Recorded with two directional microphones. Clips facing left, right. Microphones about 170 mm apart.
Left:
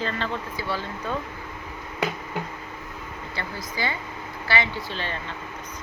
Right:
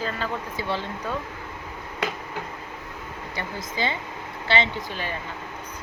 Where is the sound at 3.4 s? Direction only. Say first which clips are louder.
Right 2 dB; 20° right (ahead or behind).